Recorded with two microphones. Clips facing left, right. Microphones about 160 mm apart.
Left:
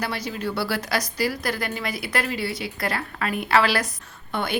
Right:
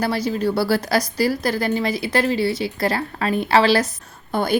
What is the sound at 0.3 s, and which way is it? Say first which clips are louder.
Speech: right 8 dB; 35° right (ahead or behind).